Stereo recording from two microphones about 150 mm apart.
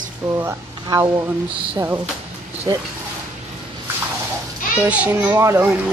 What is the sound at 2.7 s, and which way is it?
Speech, 25° right (ahead or behind).